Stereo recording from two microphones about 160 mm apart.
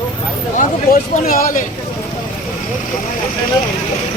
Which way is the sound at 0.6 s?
60° left (ahead or behind).